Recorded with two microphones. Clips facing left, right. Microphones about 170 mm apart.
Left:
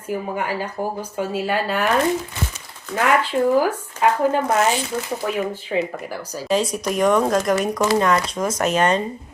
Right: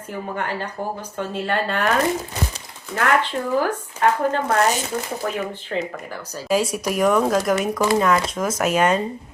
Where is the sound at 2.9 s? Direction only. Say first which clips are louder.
Left 2 dB; 10° left (ahead or behind).